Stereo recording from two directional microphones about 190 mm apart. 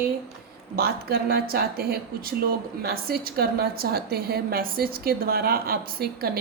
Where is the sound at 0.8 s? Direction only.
55° right (ahead or behind).